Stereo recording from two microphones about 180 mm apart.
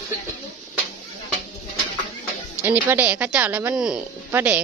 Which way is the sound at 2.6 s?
10° right (ahead or behind).